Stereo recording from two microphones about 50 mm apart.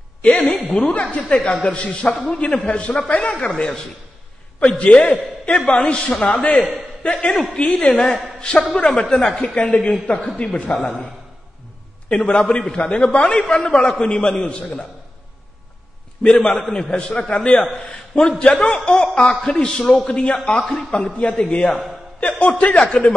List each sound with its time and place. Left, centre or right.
0.2 s a woman's voice: centre
12.1 s a man's voice: left
16.2 s a man's voice: centre
20.1 s a man's voice: left
20.3 s a man's voice: centre